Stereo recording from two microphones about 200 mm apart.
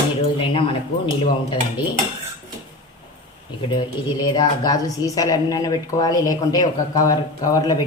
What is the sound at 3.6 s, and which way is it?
Speech, 20° left (ahead or behind).